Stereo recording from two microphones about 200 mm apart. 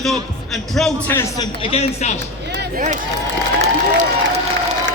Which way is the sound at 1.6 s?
30° left (ahead or behind).